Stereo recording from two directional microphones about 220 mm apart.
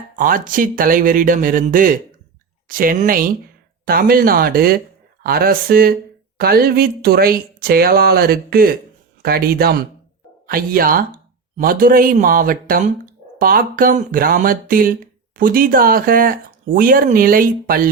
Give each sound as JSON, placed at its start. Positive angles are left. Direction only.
{"t": 0.2, "sound": "speech", "side_deg": -40}